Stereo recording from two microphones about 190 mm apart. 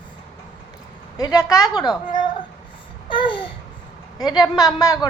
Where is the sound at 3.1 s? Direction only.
25° left (ahead or behind).